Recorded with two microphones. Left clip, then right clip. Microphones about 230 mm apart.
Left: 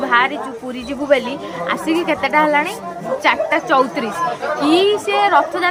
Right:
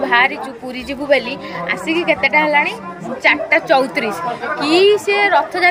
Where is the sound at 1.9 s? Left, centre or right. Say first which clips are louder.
Right 3 dB; centre.